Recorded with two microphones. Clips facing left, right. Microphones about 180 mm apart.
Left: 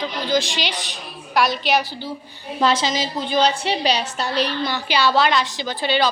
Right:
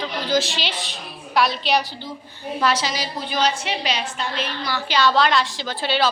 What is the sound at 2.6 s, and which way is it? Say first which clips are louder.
A woman's voice: left 3 dB; 25° left (ahead or behind).